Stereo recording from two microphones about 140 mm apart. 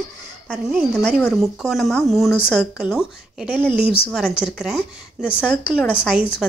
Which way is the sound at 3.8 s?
40° left (ahead or behind).